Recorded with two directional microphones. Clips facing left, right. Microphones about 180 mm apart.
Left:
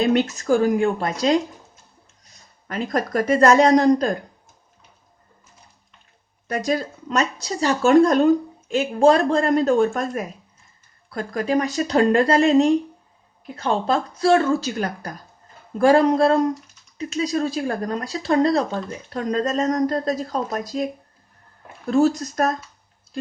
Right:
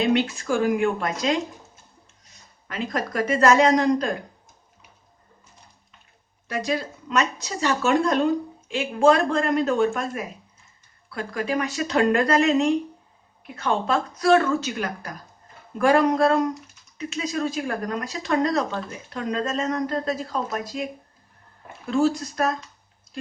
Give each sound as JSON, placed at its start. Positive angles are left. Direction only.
{"t": 0.0, "sound": "speech", "side_deg": 45}
{"t": 2.6, "sound": "speech", "side_deg": 40}
{"t": 6.5, "sound": "speech", "side_deg": 40}